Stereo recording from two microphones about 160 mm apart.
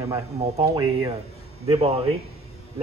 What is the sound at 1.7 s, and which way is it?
Speech, 35° right (ahead or behind).